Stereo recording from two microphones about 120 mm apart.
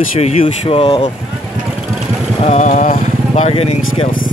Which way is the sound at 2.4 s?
70° left (ahead or behind).